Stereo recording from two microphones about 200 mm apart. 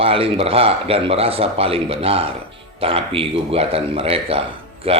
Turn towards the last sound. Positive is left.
turn(degrees=-30)  # may be behind; listen again after turning